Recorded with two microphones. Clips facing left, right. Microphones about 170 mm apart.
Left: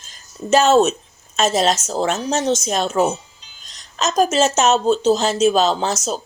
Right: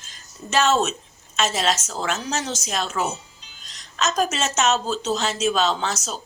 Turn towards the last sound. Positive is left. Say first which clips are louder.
# left 6 dB
turn(degrees=40)  # may be behind; listen again after turning